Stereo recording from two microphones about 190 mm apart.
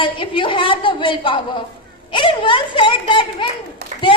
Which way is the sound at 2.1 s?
25° left (ahead or behind).